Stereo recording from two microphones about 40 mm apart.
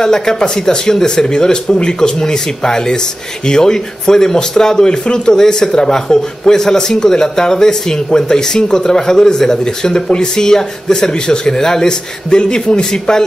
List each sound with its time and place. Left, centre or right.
0.0 s speech: centre